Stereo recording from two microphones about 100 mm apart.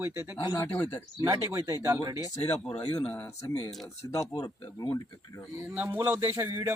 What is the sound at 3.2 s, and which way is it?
Speech, 30° left (ahead or behind).